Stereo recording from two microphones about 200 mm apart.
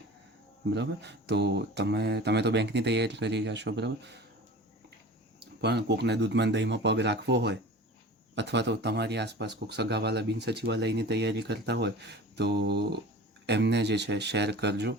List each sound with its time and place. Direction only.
0.6 s speech: 60° right (ahead or behind)
5.5 s speech: 55° right (ahead or behind)